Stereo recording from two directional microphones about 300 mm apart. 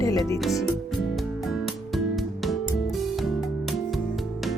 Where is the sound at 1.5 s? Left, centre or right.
Centre.